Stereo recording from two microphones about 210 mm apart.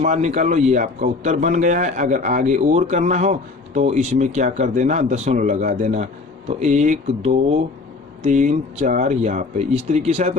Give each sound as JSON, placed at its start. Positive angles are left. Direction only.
{"t": 0.0, "sound": "a man's voice", "side_deg": -35}